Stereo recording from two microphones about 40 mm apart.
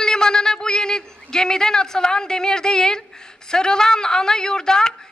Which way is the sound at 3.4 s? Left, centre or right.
Centre.